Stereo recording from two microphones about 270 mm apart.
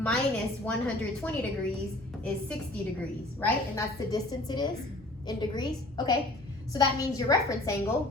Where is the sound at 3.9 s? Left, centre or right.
Centre.